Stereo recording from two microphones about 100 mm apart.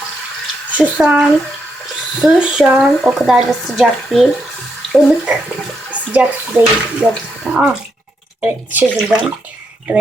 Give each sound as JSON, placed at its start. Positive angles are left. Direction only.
{"t": 0.7, "sound": "speech", "side_deg": -10}
{"t": 5.9, "sound": "speech", "side_deg": -15}
{"t": 9.0, "sound": "speech", "side_deg": -5}